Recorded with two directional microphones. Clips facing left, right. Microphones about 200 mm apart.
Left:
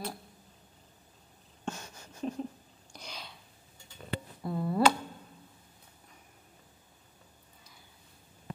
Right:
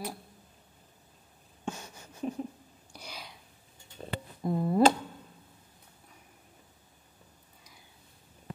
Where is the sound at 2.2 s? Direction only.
10° right (ahead or behind).